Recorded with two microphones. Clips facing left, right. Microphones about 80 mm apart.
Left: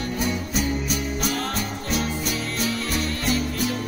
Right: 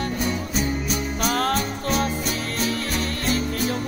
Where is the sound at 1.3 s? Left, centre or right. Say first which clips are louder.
Right 5 dB; right.